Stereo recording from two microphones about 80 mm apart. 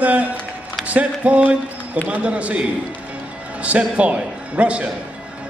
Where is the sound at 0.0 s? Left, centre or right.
Centre.